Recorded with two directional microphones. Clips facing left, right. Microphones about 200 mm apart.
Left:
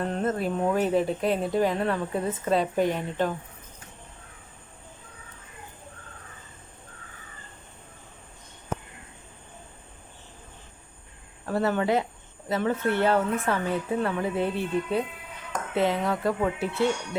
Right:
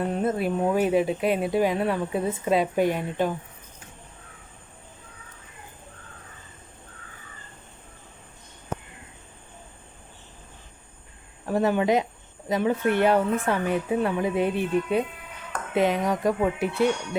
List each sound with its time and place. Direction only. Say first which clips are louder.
0.0 s speech: right 2 dB; 10° right (ahead or behind)
11.4 s speech: right 3 dB; 15° right (ahead or behind)